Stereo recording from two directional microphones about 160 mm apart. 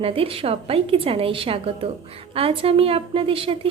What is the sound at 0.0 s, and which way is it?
A woman's voice, 35° right (ahead or behind).